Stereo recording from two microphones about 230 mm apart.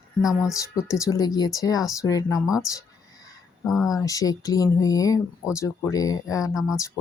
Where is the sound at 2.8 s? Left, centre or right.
Centre.